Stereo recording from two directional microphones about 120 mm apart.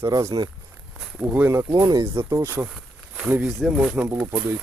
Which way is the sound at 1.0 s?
10° right (ahead or behind).